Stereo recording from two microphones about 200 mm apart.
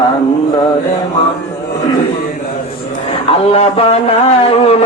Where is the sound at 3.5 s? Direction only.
30° left (ahead or behind).